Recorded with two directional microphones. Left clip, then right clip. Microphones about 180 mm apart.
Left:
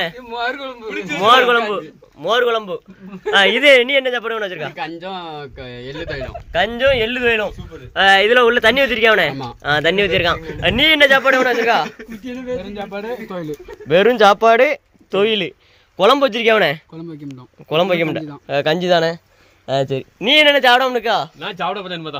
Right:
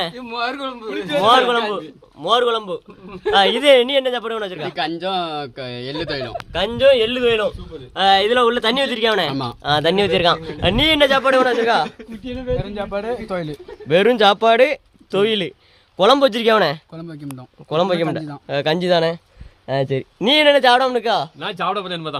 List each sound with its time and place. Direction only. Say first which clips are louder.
0.3 s a man's voice: left 1 dB; 20° right (ahead or behind)
1.2 s speech: left 3 dB; 5° left (ahead or behind)
4.7 s speech: right 5 dB; 55° right (ahead or behind)
6.5 s speech: right 1 dB; centre (ahead or behind)
7.9 s speech: left 3 dB; 10° left (ahead or behind)
9.3 s speech: right 3 dB; 60° right (ahead or behind)
9.6 s a man's voice: left 1 dB; 5° right (ahead or behind)
12.5 s a man's voice: right 2 dB; 15° right (ahead or behind)
13.8 s a man's voice: left 2 dB; 5° right (ahead or behind)
16.6 s speech: left 1 dB; centre (ahead or behind)
20.2 s a man's voice: left 1 dB; 10° right (ahead or behind)